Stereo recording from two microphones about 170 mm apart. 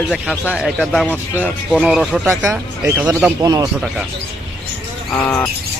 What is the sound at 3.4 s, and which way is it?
Speech, 20° right (ahead or behind).